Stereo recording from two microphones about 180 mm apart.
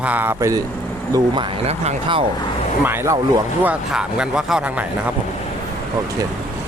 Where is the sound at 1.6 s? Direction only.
35° right (ahead or behind).